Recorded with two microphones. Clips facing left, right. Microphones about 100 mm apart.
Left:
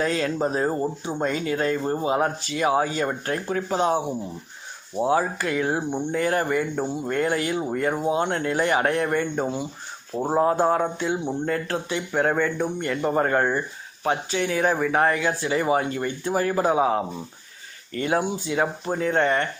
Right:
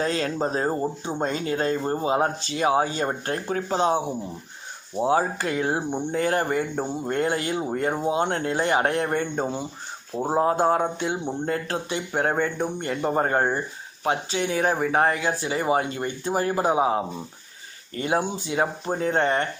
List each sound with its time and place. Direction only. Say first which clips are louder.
0.0 s speech: left 1 dB; 35° right (ahead or behind)